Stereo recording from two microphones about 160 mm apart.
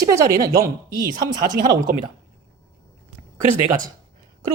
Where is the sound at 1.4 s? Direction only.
60° right (ahead or behind).